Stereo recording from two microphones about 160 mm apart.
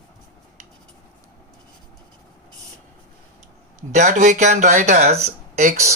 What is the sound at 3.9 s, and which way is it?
Speech, 50° right (ahead or behind).